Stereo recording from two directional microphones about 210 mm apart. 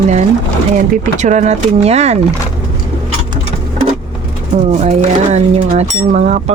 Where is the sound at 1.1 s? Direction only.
35° right (ahead or behind).